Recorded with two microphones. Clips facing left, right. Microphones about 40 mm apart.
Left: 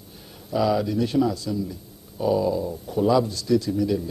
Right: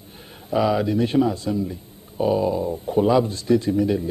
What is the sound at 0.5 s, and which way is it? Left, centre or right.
Speech, right.